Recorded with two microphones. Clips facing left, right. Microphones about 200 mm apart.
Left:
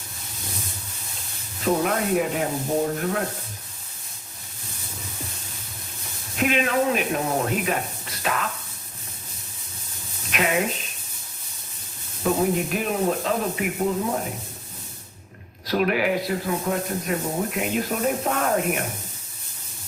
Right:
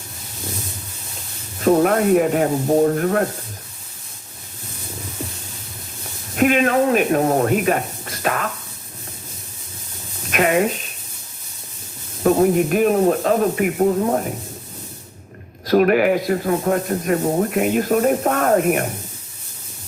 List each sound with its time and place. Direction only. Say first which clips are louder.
1.6 s speech: right 8 dB; 50° right (ahead or behind)
6.3 s speech: right 6 dB; 50° right (ahead or behind)
10.3 s speech: right 6 dB; 50° right (ahead or behind)
12.2 s speech: right 7 dB; 50° right (ahead or behind)
15.6 s speech: right 8 dB; 50° right (ahead or behind)